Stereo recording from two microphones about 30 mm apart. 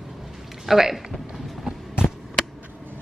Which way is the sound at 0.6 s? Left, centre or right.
Centre.